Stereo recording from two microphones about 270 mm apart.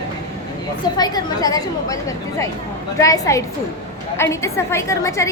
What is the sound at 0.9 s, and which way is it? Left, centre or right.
A woman's voice, centre.